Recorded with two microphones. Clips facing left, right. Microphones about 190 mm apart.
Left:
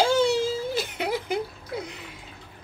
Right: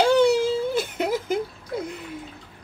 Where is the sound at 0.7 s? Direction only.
50° right (ahead or behind).